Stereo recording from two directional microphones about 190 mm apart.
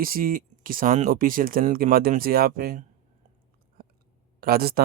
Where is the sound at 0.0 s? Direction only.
50° right (ahead or behind).